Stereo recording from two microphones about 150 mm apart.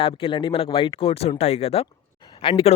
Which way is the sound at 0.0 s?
35° left (ahead or behind).